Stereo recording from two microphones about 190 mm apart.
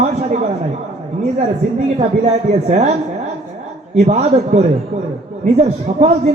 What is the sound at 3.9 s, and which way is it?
Speech, 35° right (ahead or behind).